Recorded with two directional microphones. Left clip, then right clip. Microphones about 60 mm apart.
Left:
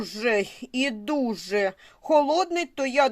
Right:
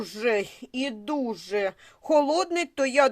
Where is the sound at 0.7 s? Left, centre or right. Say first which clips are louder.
Left 3 dB; left.